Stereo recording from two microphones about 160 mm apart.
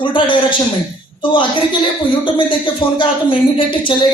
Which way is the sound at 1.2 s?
30° left (ahead or behind).